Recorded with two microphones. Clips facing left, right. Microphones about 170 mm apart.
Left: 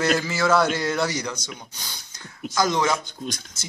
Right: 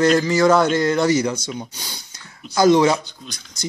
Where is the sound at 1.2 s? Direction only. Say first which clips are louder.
Right 9 dB; 30° right (ahead or behind).